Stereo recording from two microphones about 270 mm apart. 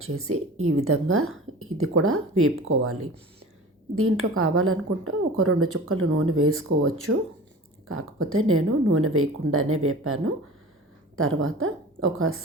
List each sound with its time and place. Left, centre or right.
0.0 s speech: right
3.9 s speech: right